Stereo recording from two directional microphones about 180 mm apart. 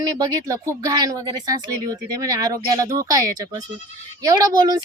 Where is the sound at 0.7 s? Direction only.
20° right (ahead or behind).